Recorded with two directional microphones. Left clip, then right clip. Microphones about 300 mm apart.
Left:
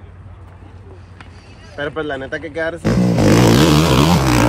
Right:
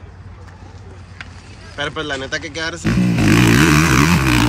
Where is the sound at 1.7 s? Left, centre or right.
Left.